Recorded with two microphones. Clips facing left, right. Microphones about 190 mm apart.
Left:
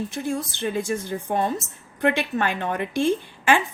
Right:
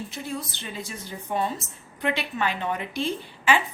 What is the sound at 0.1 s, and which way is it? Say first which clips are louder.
A woman's voice: left 6 dB; 50° left (ahead or behind).